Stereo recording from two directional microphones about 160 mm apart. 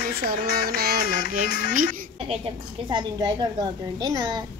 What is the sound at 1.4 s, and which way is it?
Music, 80° left.